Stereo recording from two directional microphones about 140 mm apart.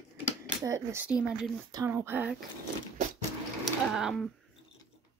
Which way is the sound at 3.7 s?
Centre (ahead or behind).